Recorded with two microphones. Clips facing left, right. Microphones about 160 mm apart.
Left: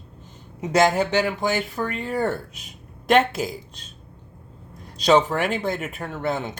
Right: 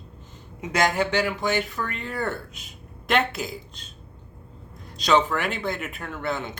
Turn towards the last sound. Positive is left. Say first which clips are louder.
# left 3 dB
turn(degrees=40)  # may be behind; listen again after turning